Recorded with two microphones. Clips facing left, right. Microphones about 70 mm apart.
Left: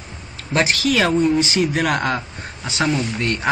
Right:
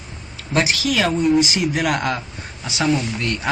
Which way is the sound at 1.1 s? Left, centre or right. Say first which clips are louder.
Even; centre.